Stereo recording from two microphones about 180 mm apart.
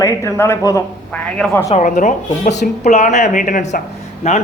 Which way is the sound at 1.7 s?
45° left (ahead or behind).